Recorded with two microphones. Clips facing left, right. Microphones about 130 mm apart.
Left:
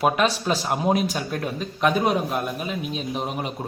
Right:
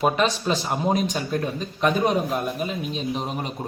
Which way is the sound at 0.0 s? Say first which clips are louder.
Even; 5° left (ahead or behind).